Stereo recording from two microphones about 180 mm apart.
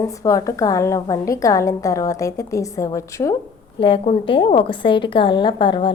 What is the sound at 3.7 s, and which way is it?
A woman's voice, 30° left (ahead or behind).